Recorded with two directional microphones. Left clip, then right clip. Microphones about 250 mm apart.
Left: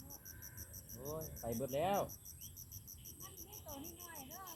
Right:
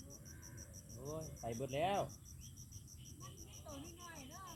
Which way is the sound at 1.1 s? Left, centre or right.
Right.